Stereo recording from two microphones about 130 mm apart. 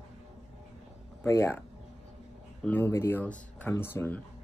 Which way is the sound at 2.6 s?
15° left (ahead or behind).